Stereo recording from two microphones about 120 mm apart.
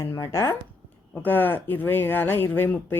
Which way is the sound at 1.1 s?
15° left (ahead or behind).